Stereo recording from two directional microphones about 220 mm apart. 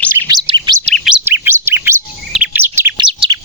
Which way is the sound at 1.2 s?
10° right (ahead or behind).